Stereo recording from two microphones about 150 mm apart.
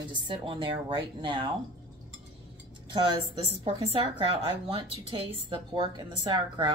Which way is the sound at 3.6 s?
35° right (ahead or behind).